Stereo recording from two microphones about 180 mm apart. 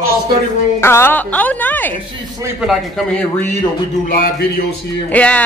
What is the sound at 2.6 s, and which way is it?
Speech, 5° right (ahead or behind).